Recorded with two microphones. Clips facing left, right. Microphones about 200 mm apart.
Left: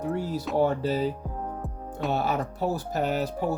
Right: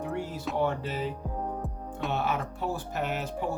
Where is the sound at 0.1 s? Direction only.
40° left (ahead or behind).